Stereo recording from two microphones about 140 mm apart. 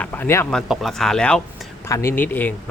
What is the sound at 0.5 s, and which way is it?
Speech, centre (ahead or behind).